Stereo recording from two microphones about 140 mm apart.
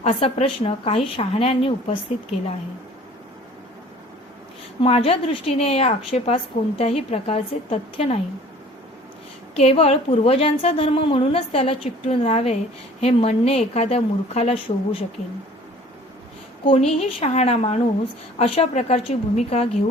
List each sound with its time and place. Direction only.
0.0 s a woman's voice: 45° left (ahead or behind)
4.8 s a woman's voice: 45° left (ahead or behind)
9.6 s a woman's voice: 45° left (ahead or behind)
16.6 s a woman's voice: 45° left (ahead or behind)